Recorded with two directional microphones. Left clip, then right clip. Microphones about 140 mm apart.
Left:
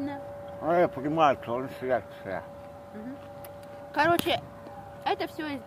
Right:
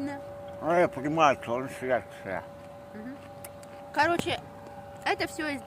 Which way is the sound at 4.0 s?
45° left (ahead or behind).